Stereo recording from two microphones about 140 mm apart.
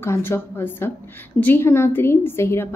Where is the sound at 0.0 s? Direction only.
15° left (ahead or behind).